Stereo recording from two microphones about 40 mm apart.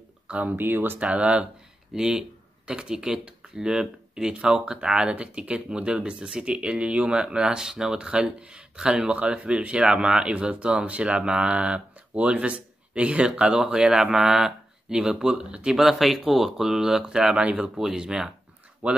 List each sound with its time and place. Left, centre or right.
0.3 s speech: right
0.6 s speech: right
0.9 s speech: right
2.0 s speech: centre
8.1 s speech: right
15.3 s speech: right
15.7 s speech: centre
18.8 s speech: right